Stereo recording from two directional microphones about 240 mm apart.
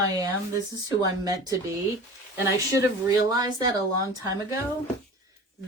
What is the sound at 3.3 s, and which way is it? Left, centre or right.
Speech, centre.